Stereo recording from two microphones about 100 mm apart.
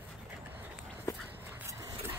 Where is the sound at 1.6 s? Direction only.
30° right (ahead or behind).